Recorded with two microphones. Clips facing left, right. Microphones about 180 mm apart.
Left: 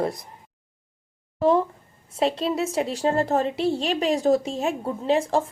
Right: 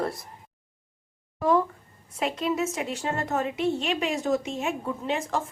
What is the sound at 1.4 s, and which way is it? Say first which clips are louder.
A woman's voice: left 3 dB; 25° left (ahead or behind).